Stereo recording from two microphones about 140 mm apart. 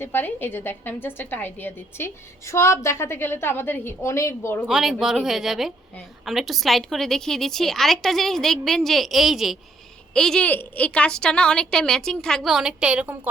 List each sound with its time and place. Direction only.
0.0 s a woman's voice: 15° left (ahead or behind)
4.6 s a woman's voice: 5° right (ahead or behind)